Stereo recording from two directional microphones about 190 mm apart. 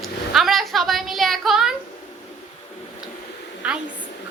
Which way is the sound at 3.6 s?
5° right (ahead or behind).